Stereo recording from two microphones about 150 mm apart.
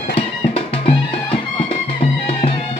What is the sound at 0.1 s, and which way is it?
Music, 45° left (ahead or behind).